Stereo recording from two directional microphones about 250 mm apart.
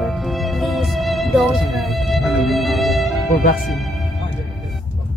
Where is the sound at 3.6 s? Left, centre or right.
Centre.